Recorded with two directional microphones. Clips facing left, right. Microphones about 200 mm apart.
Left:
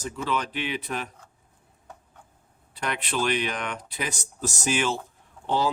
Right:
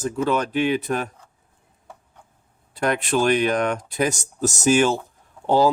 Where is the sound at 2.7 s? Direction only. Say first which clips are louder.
Right 8 dB; 45° right (ahead or behind).